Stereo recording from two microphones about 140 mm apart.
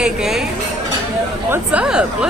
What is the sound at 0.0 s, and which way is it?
Speech, 5° right (ahead or behind).